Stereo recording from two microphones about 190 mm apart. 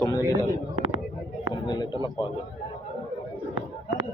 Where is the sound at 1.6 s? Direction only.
20° left (ahead or behind).